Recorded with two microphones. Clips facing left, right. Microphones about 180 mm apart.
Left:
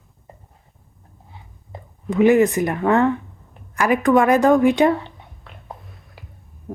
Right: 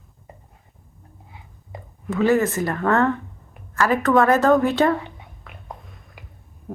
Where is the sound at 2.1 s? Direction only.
15° left (ahead or behind).